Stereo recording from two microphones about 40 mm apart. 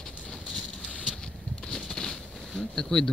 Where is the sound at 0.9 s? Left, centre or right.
Left.